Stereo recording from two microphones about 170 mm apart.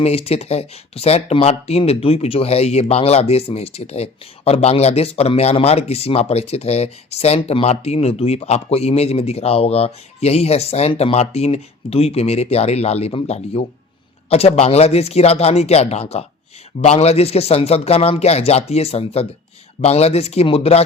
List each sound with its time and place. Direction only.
0.0 s speech: 35° left (ahead or behind)